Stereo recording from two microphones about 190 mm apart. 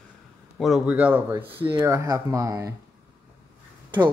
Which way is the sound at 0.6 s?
Centre (ahead or behind).